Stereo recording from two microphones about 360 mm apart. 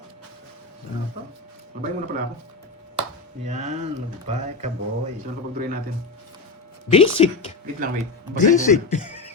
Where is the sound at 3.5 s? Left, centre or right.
Centre.